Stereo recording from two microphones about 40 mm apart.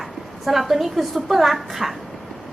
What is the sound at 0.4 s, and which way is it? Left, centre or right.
A woman's voice, centre.